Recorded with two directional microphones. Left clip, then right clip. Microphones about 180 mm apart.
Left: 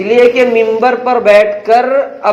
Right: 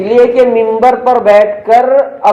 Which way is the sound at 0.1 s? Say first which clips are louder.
Right 1 dB; 25° left (ahead or behind).